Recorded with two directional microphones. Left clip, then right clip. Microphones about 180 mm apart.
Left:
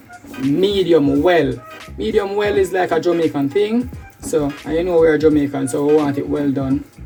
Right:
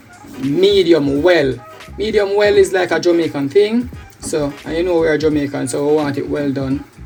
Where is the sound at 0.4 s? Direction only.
5° right (ahead or behind).